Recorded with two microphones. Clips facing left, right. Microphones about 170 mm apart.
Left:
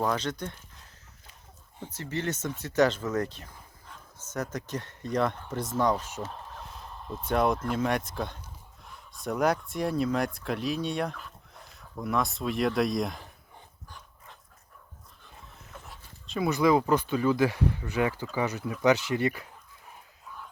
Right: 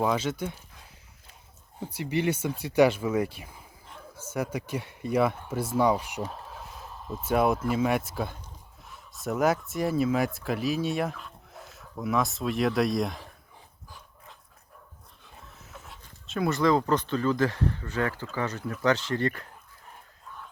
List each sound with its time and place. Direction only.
0.0 s speech: 5° right (ahead or behind)
1.8 s speech: 10° right (ahead or behind)
15.7 s pant: centre (ahead or behind)
16.6 s speech: 10° left (ahead or behind)